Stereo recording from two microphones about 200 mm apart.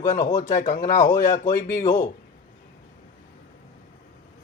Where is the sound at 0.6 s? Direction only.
40° left (ahead or behind).